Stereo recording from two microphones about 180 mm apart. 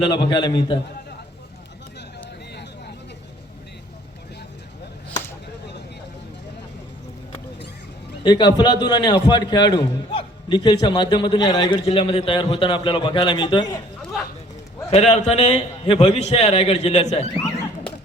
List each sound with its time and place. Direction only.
0.0 s a man's voice: 25° left (ahead or behind)
8.2 s a man's voice: 25° left (ahead or behind)
14.8 s a man's voice: 35° left (ahead or behind)